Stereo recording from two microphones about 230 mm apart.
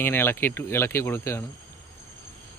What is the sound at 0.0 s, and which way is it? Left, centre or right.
Speech, centre.